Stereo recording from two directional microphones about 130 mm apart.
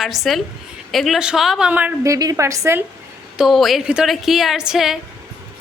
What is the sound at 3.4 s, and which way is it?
A woman's voice, centre (ahead or behind).